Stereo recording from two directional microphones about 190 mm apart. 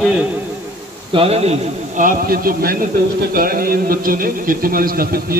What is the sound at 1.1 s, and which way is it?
A man's voice, 30° right (ahead or behind).